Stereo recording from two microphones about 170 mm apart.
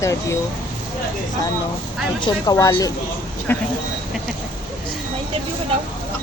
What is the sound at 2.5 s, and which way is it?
Speech, 20° left (ahead or behind).